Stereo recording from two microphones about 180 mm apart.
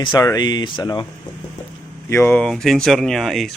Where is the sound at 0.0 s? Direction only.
20° left (ahead or behind).